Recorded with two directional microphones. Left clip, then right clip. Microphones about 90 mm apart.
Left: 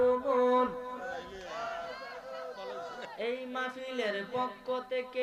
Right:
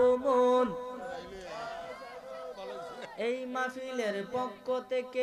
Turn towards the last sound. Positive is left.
turn(degrees=-45)  # may be behind; listen again after turning